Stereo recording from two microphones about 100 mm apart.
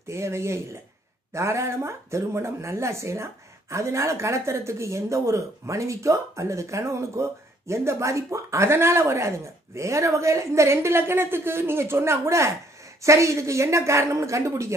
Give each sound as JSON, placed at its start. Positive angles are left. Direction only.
{"t": 0.1, "sound": "a woman's voice", "side_deg": -25}